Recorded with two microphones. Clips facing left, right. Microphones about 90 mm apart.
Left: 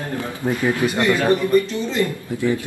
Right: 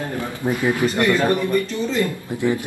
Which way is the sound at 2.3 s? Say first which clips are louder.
Even; 20° right (ahead or behind).